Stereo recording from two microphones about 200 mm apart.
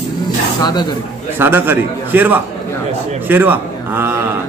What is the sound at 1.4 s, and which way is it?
A man's voice, 10° right (ahead or behind).